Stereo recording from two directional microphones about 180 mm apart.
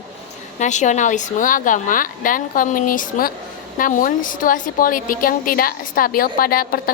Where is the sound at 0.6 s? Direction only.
40° left (ahead or behind).